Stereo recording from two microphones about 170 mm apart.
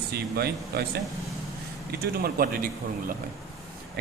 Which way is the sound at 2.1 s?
65° right (ahead or behind).